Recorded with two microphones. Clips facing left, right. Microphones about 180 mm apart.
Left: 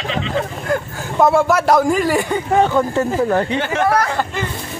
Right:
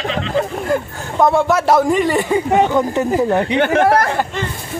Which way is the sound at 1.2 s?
Centre (ahead or behind).